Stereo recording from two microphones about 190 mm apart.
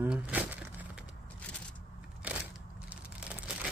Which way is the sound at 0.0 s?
10° right (ahead or behind).